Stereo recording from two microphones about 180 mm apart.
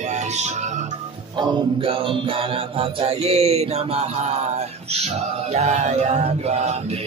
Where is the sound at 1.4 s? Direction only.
30° right (ahead or behind).